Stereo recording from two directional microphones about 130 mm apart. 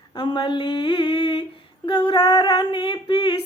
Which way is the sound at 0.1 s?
35° left (ahead or behind).